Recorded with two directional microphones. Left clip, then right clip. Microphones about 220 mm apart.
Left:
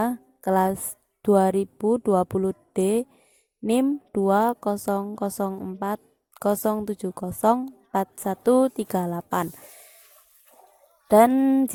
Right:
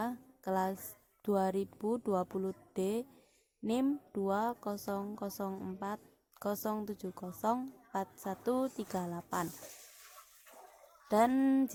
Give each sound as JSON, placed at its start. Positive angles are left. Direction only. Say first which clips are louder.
{"t": 0.0, "sound": "a sound", "louder": "left 13 dB", "side_deg": 40}
{"t": 1.2, "sound": "a woman's voice", "louder": "left 13 dB", "side_deg": 40}
{"t": 11.1, "sound": "a woman's voice", "louder": "left 12 dB", "side_deg": 40}